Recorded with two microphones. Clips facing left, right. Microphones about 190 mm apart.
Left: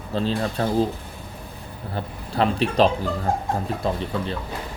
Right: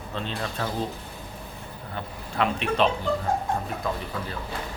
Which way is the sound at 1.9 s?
35° left (ahead or behind).